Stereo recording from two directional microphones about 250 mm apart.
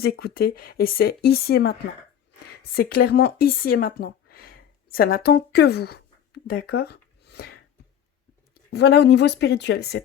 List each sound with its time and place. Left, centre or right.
0.0 s speech: left
2.7 s speech: left
8.7 s speech: left